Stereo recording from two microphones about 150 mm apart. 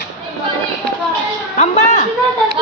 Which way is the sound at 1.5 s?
50° left (ahead or behind).